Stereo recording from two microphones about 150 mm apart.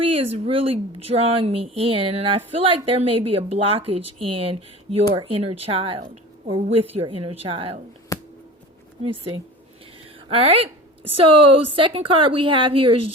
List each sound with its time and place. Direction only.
0.0 s a woman's voice: 40° right (ahead or behind)
8.1 s a sound: 20° left (ahead or behind)
9.0 s a woman's voice: 35° right (ahead or behind)
11.7 s a woman's voice: 35° right (ahead or behind)